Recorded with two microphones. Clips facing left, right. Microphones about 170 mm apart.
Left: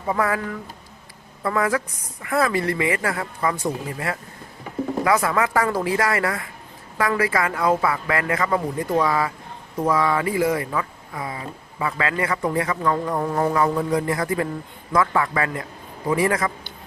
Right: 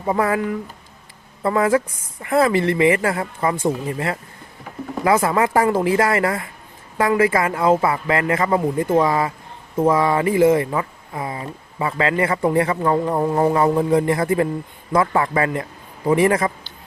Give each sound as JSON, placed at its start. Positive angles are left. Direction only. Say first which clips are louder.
{"t": 0.1, "sound": "speech", "louder": "right 4 dB", "side_deg": -25}